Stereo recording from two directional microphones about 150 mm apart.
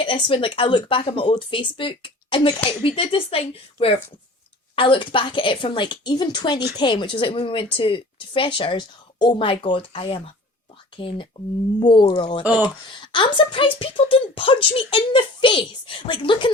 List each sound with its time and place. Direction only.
0.0 s speech: 35° left (ahead or behind)
11.3 s speech: 35° left (ahead or behind)